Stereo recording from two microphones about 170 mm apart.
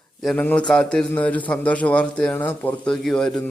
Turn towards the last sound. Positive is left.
turn(degrees=5)  # may be behind; listen again after turning